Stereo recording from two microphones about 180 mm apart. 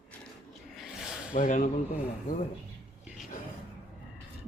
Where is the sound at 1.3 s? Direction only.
45° left (ahead or behind).